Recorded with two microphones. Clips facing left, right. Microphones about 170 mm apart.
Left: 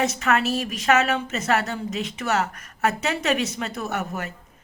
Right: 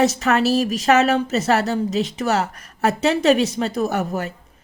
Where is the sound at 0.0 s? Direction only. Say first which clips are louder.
Right 5 dB; 35° right (ahead or behind).